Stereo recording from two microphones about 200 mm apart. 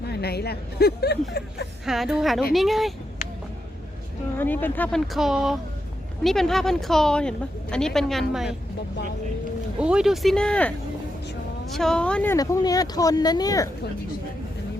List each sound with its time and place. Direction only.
0.0 s speech: 55° left (ahead or behind)
1.8 s a woman's voice: centre (ahead or behind)
4.4 s a woman's voice: 10° left (ahead or behind)
9.8 s a woman's voice: 5° right (ahead or behind); by 13.7 s 20° left (ahead or behind)